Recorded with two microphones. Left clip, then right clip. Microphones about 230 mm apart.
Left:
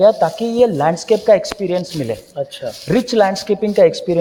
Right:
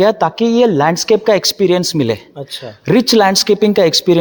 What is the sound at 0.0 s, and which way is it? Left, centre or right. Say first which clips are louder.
Speech: even; right.